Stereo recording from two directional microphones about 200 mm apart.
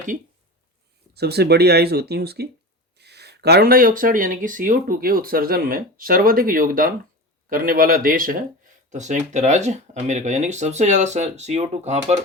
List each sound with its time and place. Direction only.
1.1 s speech: 55° right (ahead or behind); by 12.1 s 35° right (ahead or behind)